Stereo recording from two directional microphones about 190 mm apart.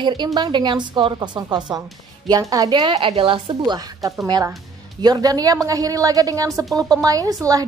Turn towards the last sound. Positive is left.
turn(degrees=-20)  # may be behind; listen again after turning